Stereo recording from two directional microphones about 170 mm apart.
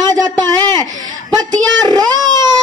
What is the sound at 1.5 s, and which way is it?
Speech, 25° right (ahead or behind).